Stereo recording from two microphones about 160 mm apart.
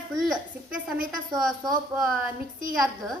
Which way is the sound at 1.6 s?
25° right (ahead or behind).